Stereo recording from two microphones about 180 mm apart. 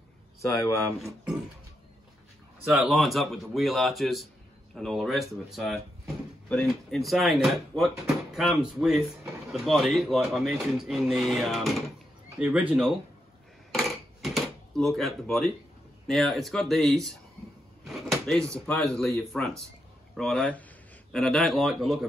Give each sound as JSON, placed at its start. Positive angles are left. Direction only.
{"t": 0.4, "sound": "speech", "side_deg": 15}
{"t": 0.9, "sound": "speech", "side_deg": 0}
{"t": 2.6, "sound": "speech", "side_deg": -5}
{"t": 13.7, "sound": "a sound", "side_deg": 0}
{"t": 16.1, "sound": "speech", "side_deg": 0}